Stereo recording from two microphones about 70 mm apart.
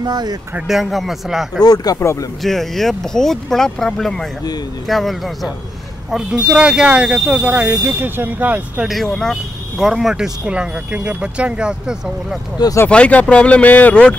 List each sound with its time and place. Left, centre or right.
0.0 s speech: right
0.7 s speech: centre
1.6 s speech: left
2.4 s speech: centre
6.1 s speech: centre
7.8 s speech: right
8.8 s speech: centre
9.8 s speech: centre
12.8 s speech: centre